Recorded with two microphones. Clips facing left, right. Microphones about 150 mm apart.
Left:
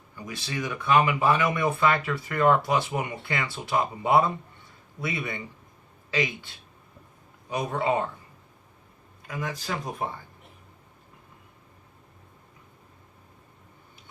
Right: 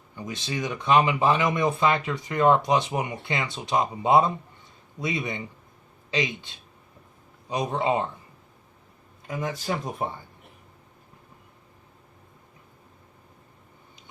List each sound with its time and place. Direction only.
0.2 s speech: 20° right (ahead or behind)
9.2 s speech: 25° right (ahead or behind)